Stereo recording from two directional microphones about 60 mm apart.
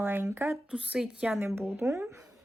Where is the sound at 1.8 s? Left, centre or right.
Right.